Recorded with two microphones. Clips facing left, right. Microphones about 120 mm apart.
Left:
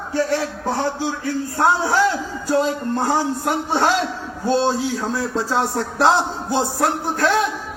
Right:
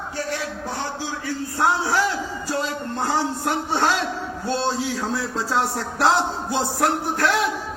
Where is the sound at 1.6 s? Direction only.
25° left (ahead or behind).